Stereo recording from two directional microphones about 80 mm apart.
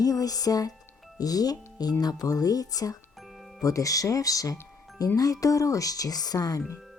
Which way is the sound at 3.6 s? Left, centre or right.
Left.